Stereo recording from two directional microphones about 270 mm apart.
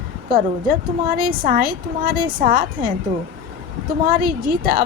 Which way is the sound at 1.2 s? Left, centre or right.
Right.